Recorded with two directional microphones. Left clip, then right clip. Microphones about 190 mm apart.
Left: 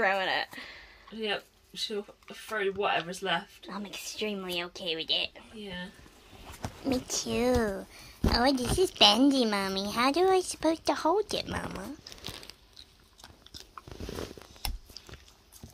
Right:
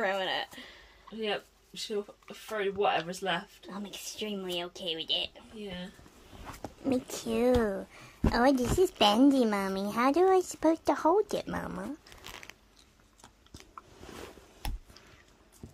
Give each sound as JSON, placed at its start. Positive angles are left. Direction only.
{"t": 0.0, "sound": "a sound", "side_deg": 30}
{"t": 1.1, "sound": "speech", "side_deg": 10}
{"t": 3.6, "sound": "a woman's voice", "side_deg": 30}
{"t": 5.6, "sound": "speech", "side_deg": 5}
{"t": 6.8, "sound": "a woman's voice", "side_deg": -20}
{"t": 11.5, "sound": "speech", "side_deg": -10}